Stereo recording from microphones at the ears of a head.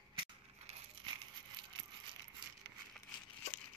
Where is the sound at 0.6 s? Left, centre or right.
Right.